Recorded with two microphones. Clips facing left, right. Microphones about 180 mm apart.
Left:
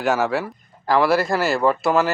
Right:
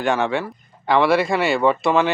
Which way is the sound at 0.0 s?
5° left (ahead or behind).